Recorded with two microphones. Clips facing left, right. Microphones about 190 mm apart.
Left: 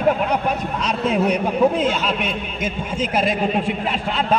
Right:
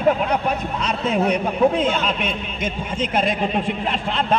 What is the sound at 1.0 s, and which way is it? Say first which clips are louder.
A man's voice: left 1 dB; 5° left (ahead or behind).